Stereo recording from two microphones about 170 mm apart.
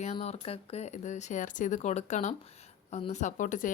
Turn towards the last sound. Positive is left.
turn(degrees=50)  # may be behind; listen again after turning